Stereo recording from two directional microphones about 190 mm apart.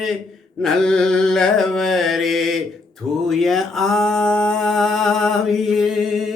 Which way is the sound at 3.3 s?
Centre (ahead or behind).